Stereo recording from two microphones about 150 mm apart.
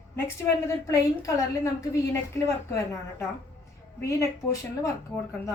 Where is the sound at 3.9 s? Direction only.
20° left (ahead or behind).